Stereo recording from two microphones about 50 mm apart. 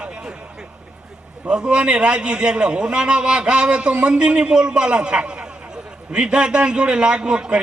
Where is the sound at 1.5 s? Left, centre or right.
Right.